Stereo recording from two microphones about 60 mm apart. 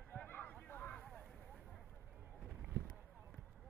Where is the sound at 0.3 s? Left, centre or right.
Left.